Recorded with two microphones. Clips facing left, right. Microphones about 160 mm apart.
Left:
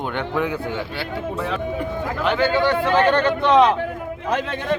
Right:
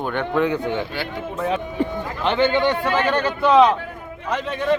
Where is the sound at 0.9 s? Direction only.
30° left (ahead or behind).